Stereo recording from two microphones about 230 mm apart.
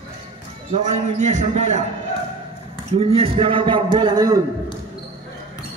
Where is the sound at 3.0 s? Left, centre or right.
Right.